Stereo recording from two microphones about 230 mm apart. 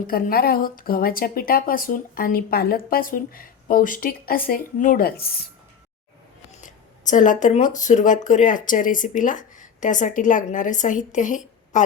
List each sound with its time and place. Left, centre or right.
0.1 s a woman's voice: left
6.6 s a woman's voice: left